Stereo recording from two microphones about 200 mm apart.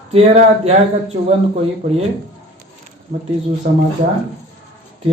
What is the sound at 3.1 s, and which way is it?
Speech, 35° right (ahead or behind).